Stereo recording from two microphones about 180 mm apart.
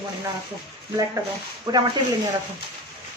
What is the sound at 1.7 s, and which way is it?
Speech, 20° right (ahead or behind).